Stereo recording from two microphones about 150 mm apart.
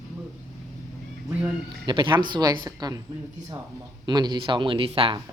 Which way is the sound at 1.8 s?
30° right (ahead or behind).